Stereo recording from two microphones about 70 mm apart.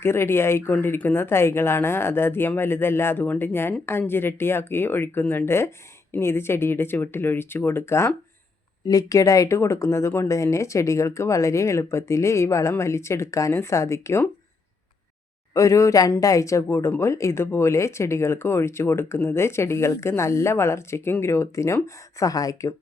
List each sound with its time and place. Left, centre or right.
0.0 s speech: left
8.9 s speech: left
15.5 s speech: left
22.2 s speech: left